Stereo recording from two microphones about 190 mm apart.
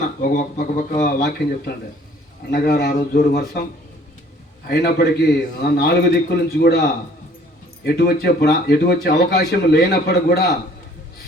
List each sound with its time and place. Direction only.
0.2 s a man's voice: 50° left (ahead or behind)
4.7 s speech: 60° left (ahead or behind)